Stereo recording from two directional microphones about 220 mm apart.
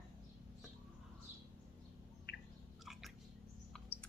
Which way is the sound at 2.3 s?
45° left (ahead or behind).